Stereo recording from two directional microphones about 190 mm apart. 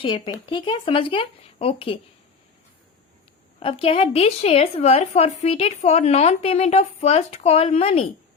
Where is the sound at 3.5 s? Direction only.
30° left (ahead or behind).